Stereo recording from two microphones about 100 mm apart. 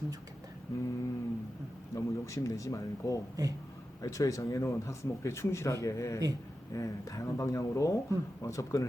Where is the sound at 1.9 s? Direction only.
30° left (ahead or behind).